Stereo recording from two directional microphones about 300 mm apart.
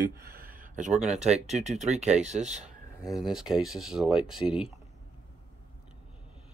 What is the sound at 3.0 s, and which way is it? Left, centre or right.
Speech, centre.